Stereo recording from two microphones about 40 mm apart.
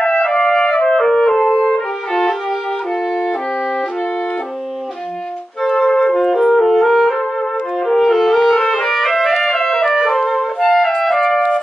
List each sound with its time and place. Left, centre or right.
0.0 s music: centre
0.5 s clarinet: centre
1.4 s music: centre
5.6 s clarinet: centre
6.1 s music: centre
11.0 s music: centre